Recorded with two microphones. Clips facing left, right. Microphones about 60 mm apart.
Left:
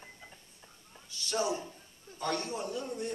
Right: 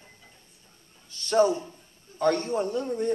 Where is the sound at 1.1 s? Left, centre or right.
Right.